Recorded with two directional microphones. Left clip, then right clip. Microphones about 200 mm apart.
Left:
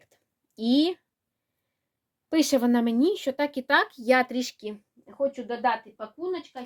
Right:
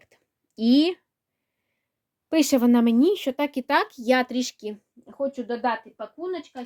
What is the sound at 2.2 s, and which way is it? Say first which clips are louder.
Speech: right 3 dB; 35° right (ahead or behind).